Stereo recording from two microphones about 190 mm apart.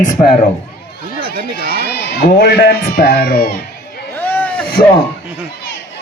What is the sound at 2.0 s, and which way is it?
A man's voice, 60° left (ahead or behind).